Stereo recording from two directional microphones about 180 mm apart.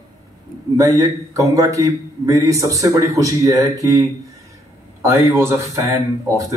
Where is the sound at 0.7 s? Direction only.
20° right (ahead or behind).